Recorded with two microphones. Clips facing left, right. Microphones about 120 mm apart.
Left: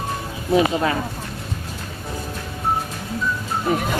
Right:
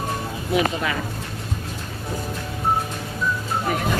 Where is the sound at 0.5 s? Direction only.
30° left (ahead or behind).